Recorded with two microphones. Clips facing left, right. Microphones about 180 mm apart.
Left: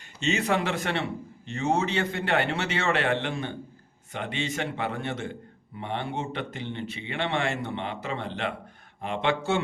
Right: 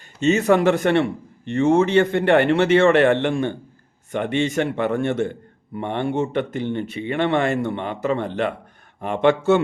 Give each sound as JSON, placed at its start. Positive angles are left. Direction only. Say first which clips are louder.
{"t": 0.3, "sound": "a man's voice", "louder": "right 10 dB", "side_deg": -45}